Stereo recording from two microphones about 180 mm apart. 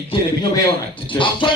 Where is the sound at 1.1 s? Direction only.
20° left (ahead or behind).